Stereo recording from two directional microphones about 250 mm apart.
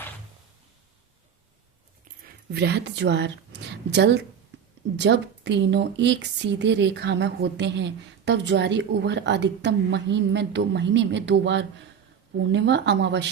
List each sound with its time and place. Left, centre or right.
2.5 s speech: right